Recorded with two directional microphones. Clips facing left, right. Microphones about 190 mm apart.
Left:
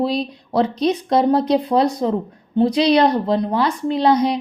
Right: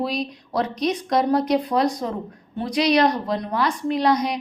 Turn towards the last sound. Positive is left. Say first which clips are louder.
# left 4 dB
turn(degrees=30)  # may be behind; listen again after turning